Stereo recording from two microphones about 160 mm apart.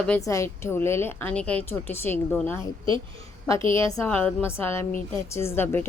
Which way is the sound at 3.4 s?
20° left (ahead or behind).